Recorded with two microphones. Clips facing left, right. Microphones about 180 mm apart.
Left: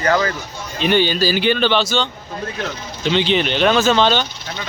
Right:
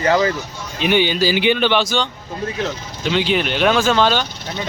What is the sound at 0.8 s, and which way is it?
Speech, 15° right (ahead or behind).